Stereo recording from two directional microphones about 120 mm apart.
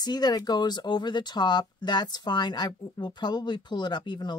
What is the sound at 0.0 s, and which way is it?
Speech, 35° left (ahead or behind).